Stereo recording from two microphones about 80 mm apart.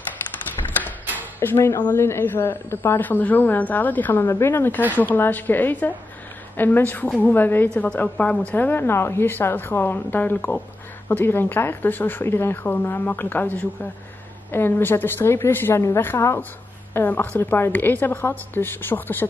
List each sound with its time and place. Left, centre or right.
1.4 s a woman's voice: left